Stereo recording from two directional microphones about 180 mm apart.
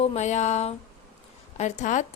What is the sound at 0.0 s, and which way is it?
A woman's voice, 35° left (ahead or behind).